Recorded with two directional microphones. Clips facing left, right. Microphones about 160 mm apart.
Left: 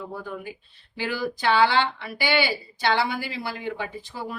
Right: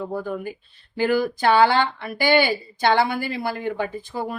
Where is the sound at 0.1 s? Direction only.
45° right (ahead or behind).